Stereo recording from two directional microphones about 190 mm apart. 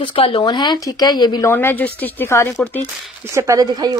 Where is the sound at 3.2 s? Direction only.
15° right (ahead or behind).